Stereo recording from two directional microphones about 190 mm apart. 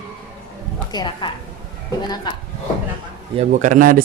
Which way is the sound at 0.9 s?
25° left (ahead or behind).